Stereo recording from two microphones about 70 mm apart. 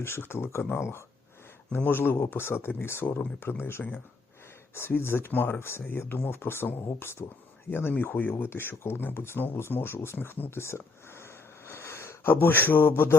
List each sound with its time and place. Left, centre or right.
0.0 s speech: left
1.7 s speech: left
3.6 s speech: left